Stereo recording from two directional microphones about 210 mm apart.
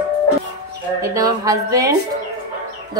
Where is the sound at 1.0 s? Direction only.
15° right (ahead or behind).